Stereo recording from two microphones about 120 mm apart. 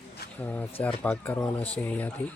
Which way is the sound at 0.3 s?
15° left (ahead or behind).